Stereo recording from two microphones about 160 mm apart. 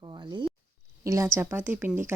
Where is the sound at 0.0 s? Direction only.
30° right (ahead or behind).